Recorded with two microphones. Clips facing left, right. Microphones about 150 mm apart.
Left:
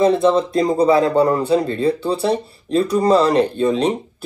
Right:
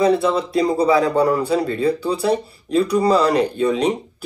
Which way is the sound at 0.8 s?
30° left (ahead or behind).